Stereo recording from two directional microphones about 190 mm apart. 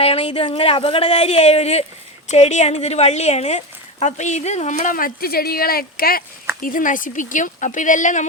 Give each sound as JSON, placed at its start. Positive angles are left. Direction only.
{"t": 0.0, "sound": "a woman's voice", "side_deg": 30}